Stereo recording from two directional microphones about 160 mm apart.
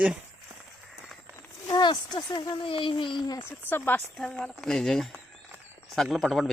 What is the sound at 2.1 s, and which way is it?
Speech, 25° left (ahead or behind).